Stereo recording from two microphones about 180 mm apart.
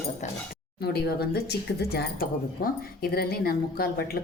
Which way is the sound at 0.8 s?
60° left (ahead or behind).